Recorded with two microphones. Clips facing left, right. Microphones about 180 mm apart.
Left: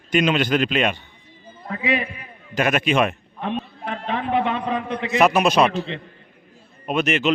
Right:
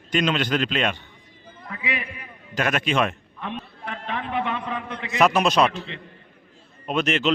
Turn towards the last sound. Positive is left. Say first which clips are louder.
# left 2 dB
turn(degrees=5)  # may be behind; listen again after turning